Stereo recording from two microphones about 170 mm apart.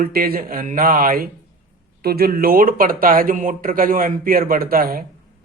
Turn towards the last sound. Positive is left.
turn(degrees=-60)  # may be behind; listen again after turning